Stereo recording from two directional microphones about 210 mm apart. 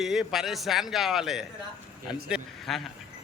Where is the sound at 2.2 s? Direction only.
Centre (ahead or behind).